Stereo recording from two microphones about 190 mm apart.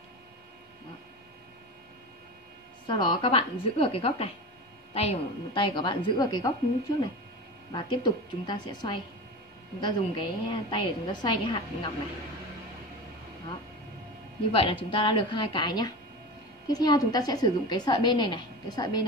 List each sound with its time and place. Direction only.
2.9 s a woman's voice: 25° left (ahead or behind)
7.7 s a woman's voice: 25° left (ahead or behind)
14.5 s a woman's voice: 30° left (ahead or behind)